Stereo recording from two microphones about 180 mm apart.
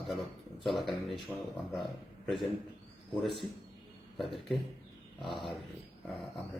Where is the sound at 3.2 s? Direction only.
30° left (ahead or behind).